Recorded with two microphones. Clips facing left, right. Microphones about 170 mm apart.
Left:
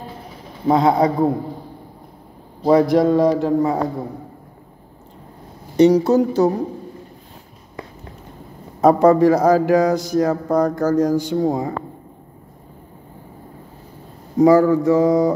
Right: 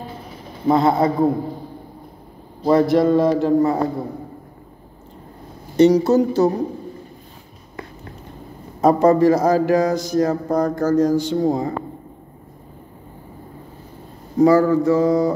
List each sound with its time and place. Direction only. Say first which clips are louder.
0.8 s speech: left 3 dB; 15° left (ahead or behind)
2.6 s a man's voice: left 1 dB; centre (ahead or behind)
3.3 s speech: right 1 dB; 10° left (ahead or behind)
5.8 s speech: even; 10° left (ahead or behind)
8.8 s speech: left 1 dB; 10° left (ahead or behind)
14.4 s a sound: left 1 dB; 15° left (ahead or behind)